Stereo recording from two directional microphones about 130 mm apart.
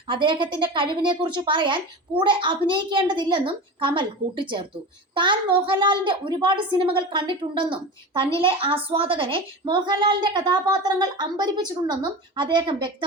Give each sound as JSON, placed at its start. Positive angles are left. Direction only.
{"t": 0.1, "sound": "a woman's voice", "side_deg": -40}